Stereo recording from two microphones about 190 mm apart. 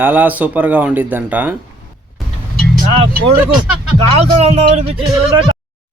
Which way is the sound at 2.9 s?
30° right (ahead or behind).